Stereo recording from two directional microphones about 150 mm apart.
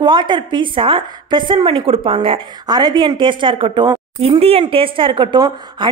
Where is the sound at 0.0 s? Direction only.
30° right (ahead or behind).